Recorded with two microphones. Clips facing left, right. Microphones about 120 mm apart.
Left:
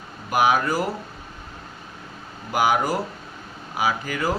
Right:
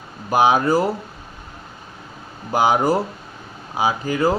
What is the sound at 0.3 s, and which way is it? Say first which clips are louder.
Speech: right 4 dB; 25° right (ahead or behind).